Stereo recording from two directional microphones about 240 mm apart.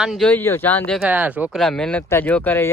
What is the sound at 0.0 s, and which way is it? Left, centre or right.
Speech, centre.